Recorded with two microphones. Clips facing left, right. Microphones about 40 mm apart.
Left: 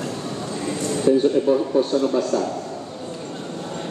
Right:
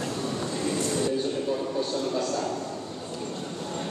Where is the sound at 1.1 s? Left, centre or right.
Left.